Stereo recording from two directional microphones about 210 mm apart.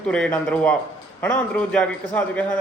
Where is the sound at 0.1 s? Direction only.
5° left (ahead or behind).